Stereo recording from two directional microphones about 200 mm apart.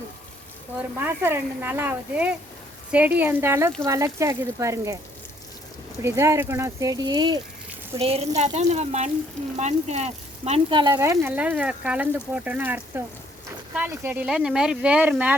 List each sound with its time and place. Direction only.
0.8 s speech: 10° right (ahead or behind)
6.0 s speech: 15° right (ahead or behind)